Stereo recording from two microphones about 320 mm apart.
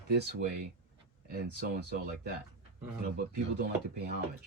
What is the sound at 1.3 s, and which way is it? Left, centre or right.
Speech, right.